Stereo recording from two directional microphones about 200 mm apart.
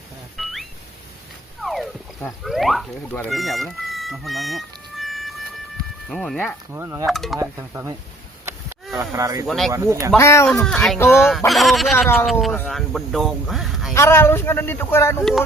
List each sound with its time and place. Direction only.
0.3 s a sound: centre (ahead or behind)
1.6 s speech: centre (ahead or behind)
6.7 s speech: 10° right (ahead or behind)
7.1 s speech: centre (ahead or behind)
7.3 s speech: 15° right (ahead or behind)
9.1 s speech: 15° right (ahead or behind)
9.5 s speech: centre (ahead or behind)
9.7 s speech: 15° right (ahead or behind)
10.2 s speech: 15° left (ahead or behind)
10.5 s speech: centre (ahead or behind)
13.9 s speech: 15° left (ahead or behind)